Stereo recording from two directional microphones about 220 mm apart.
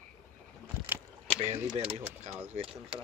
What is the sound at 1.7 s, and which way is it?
Speech, 25° right (ahead or behind).